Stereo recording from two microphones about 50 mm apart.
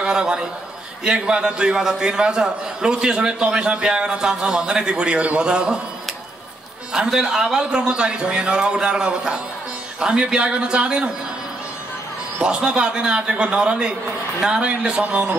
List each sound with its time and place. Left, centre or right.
0.0 s a man's voice: centre
6.9 s a man's voice: centre
12.6 s a man's voice: centre